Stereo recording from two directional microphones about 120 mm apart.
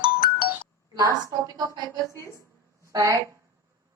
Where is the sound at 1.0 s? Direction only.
30° right (ahead or behind).